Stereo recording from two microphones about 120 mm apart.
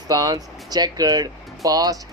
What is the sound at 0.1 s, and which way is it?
Speech, 30° right (ahead or behind).